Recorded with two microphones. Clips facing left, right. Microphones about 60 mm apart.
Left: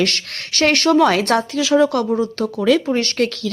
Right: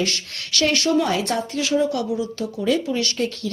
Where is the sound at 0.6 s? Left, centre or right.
Left.